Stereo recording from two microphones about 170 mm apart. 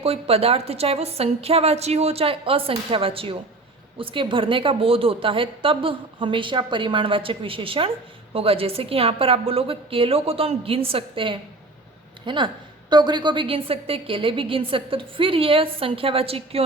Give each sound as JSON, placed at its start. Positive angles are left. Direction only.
{"t": 0.0, "sound": "a woman's voice", "side_deg": -35}